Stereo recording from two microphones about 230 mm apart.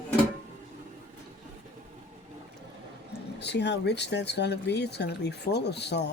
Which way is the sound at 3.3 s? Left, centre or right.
Left.